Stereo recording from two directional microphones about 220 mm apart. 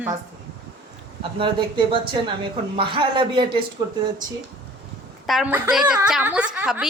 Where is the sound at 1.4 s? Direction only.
20° right (ahead or behind).